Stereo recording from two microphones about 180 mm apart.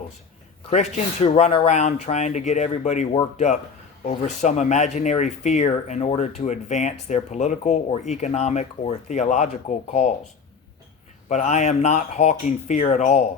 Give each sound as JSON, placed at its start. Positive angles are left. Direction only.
{"t": 0.7, "sound": "speech", "side_deg": 40}
{"t": 11.3, "sound": "speech", "side_deg": 40}